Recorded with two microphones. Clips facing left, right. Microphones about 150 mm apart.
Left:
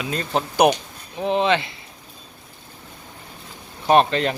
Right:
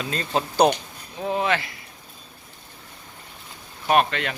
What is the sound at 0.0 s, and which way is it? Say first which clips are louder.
Speech: left 1 dB; 5° left (ahead or behind).